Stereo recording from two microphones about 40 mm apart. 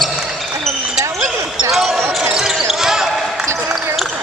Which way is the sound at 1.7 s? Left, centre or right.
Centre.